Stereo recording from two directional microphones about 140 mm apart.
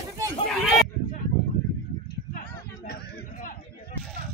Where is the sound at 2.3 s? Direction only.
90° left.